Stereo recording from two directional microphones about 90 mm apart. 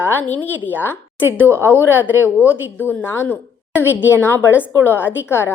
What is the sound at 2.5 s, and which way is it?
Speech, 20° left (ahead or behind).